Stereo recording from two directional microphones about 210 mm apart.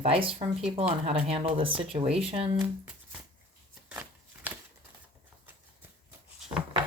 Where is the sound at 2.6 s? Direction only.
5° right (ahead or behind).